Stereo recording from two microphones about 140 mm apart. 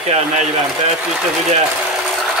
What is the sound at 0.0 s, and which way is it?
Speech, 50° right (ahead or behind).